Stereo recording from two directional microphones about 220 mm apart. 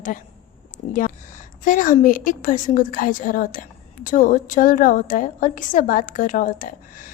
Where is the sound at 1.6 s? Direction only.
35° left (ahead or behind).